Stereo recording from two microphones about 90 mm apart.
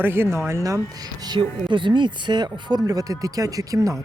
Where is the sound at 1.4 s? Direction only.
65° right (ahead or behind).